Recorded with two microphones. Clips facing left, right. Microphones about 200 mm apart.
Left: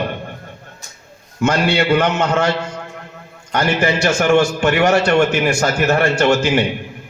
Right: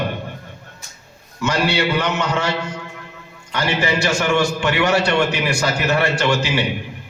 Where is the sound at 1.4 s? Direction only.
50° left (ahead or behind).